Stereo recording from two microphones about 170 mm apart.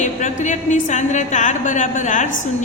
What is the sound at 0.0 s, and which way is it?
Speech, 45° left (ahead or behind).